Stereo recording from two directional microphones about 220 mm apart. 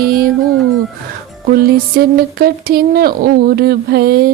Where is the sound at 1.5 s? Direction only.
45° right (ahead or behind).